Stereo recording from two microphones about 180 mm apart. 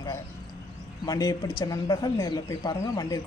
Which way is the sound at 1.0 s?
20° left (ahead or behind).